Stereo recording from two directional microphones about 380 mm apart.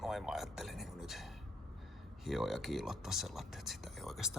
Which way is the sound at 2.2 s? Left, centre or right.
Centre.